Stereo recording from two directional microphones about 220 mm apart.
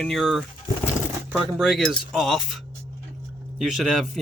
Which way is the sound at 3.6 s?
Centre (ahead or behind).